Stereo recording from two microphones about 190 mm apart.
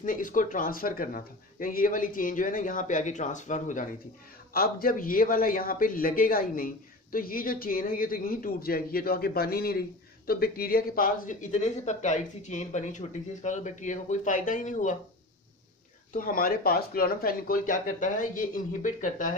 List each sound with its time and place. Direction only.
0.0 s a man's voice: 45° left (ahead or behind)
4.6 s a man's voice: 50° left (ahead or behind)
16.1 s a man's voice: 45° left (ahead or behind)